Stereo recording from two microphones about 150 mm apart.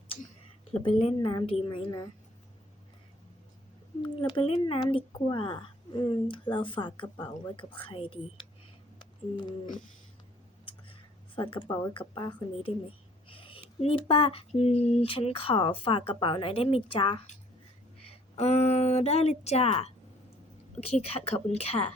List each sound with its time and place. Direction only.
0.7 s a woman's voice: 35° left (ahead or behind)
4.2 s a woman's voice: 35° left (ahead or behind)
11.3 s a woman's voice: 35° left (ahead or behind)
21.0 s speech: 45° left (ahead or behind)